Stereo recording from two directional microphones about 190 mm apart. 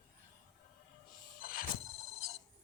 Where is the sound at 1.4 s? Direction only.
50° left (ahead or behind).